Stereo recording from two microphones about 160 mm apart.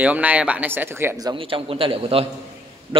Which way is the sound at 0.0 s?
10° right (ahead or behind).